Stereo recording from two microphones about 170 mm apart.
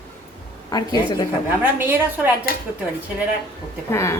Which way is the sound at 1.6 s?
10° right (ahead or behind).